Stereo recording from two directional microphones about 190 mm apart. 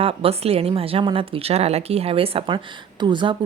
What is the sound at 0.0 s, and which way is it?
A woman's voice, 30° right (ahead or behind).